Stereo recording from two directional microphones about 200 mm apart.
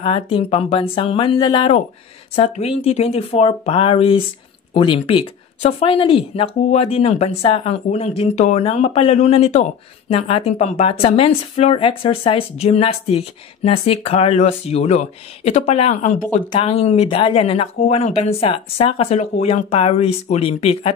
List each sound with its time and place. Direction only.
0.0 s speech: 25° left (ahead or behind)